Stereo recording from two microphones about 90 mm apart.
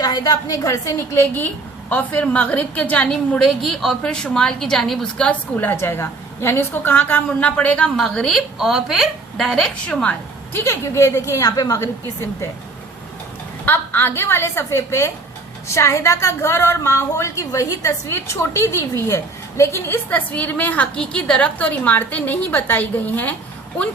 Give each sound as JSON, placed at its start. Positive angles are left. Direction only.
{"t": 0.0, "sound": "a woman's voice", "side_deg": 50}
{"t": 10.5, "sound": "a woman's voice", "side_deg": 30}
{"t": 13.7, "sound": "a woman's voice", "side_deg": 25}